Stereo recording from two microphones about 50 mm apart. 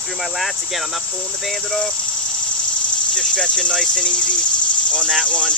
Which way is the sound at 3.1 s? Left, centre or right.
Centre.